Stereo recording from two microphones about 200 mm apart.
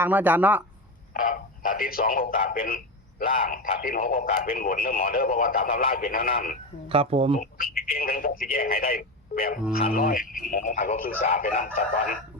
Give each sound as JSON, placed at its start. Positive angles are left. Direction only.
{"t": 0.0, "sound": "speech", "side_deg": -10}
{"t": 1.1, "sound": "speech", "side_deg": 45}
{"t": 6.8, "sound": "speech", "side_deg": -30}
{"t": 7.3, "sound": "speech", "side_deg": 45}